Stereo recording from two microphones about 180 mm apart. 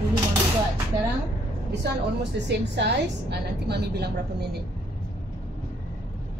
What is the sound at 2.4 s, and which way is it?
A woman's voice, 75° right (ahead or behind).